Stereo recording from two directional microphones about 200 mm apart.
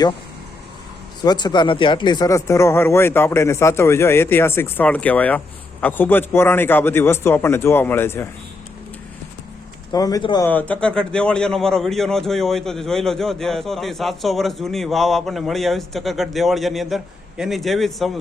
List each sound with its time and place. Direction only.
1.2 s speech: 20° left (ahead or behind)
9.9 s speech: 20° left (ahead or behind)
10.5 s speech: 5° left (ahead or behind)